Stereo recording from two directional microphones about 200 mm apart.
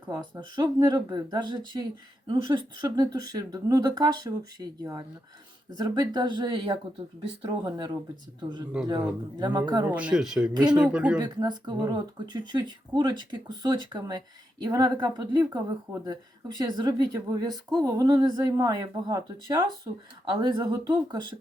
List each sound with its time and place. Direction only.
0.0 s speech: 20° right (ahead or behind)
9.9 s speech: 5° right (ahead or behind)
11.2 s speech: 20° right (ahead or behind)